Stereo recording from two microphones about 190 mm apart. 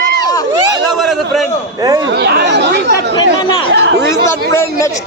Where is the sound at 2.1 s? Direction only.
60° right (ahead or behind).